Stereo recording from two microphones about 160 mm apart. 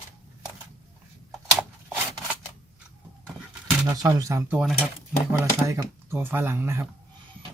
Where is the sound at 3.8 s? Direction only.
20° right (ahead or behind).